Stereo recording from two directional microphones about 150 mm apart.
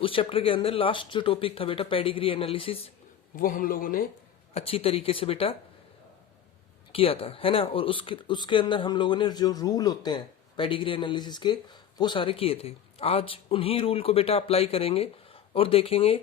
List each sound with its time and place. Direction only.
0.0 s speech: 35° left (ahead or behind)
3.3 s a man's voice: 65° left (ahead or behind)
4.5 s speech: 40° left (ahead or behind)
6.9 s speech: 40° left (ahead or behind)